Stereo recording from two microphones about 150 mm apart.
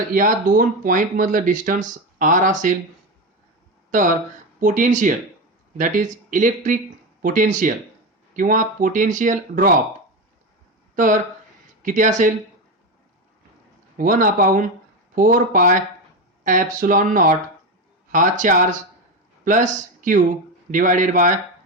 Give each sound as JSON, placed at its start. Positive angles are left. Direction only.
{"t": 0.1, "sound": "speech", "side_deg": -65}
{"t": 3.9, "sound": "speech", "side_deg": -60}
{"t": 10.9, "sound": "speech", "side_deg": -60}
{"t": 13.9, "sound": "speech", "side_deg": -65}